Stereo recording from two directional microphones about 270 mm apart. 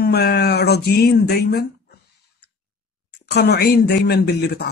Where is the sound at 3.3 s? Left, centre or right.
Left.